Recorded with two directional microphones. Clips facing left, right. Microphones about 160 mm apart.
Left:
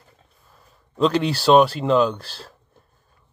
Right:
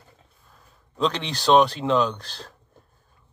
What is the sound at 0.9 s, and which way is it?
Speech, 5° left (ahead or behind).